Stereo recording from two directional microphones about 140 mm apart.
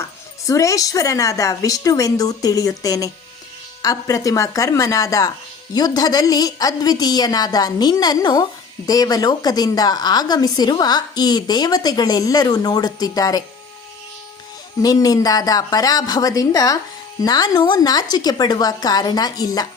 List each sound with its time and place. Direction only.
0.4 s speech: 25° left (ahead or behind)
14.8 s speech: 25° left (ahead or behind)